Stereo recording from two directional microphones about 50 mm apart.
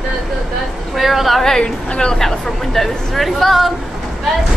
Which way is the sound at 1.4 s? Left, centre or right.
Centre.